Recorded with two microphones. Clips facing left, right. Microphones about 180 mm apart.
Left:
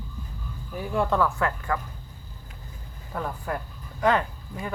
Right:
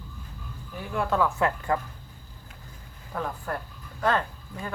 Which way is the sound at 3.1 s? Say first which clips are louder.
Even; 5° left (ahead or behind).